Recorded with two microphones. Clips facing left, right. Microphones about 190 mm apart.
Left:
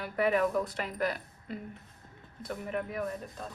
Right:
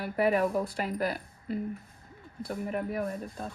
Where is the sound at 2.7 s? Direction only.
35° right (ahead or behind).